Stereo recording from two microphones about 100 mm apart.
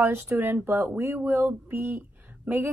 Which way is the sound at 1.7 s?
20° right (ahead or behind).